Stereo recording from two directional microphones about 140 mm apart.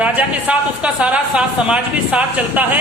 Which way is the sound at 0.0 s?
10° right (ahead or behind).